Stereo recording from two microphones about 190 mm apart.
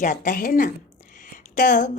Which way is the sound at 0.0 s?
45° left (ahead or behind).